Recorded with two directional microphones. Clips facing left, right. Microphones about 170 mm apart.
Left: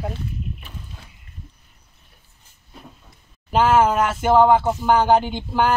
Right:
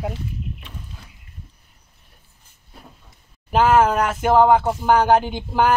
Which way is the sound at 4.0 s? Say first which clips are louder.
Even; 10° right (ahead or behind).